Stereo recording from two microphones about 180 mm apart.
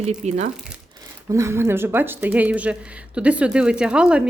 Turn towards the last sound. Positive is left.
turn(degrees=-5)  # may be behind; listen again after turning